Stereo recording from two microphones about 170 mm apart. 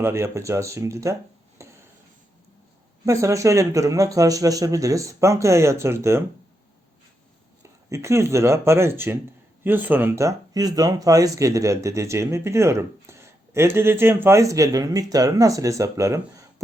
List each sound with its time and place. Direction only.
0.0 s speech: 15° right (ahead or behind)
1.6 s a sound: 15° right (ahead or behind)
3.1 s speech: 20° right (ahead or behind)
7.9 s speech: 15° right (ahead or behind)